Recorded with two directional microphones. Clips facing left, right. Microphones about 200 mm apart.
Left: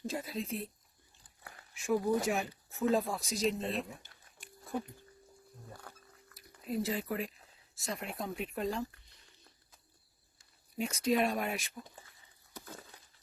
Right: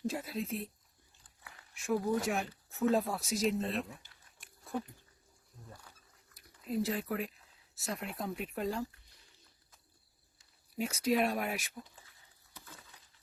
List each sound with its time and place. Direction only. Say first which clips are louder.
0.1 s speech: even; 5° right (ahead or behind)
1.7 s speech: left 2 dB; centre (ahead or behind)
5.8 s a sound: left 7 dB; 60° left (ahead or behind)
6.7 s speech: even; centre (ahead or behind)
10.8 s speech: even; 5° right (ahead or behind)
12.5 s a sound: left 7 dB; 45° left (ahead or behind)